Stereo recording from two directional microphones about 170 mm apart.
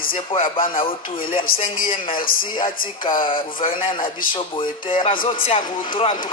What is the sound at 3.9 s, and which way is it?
Speech, 30° left (ahead or behind).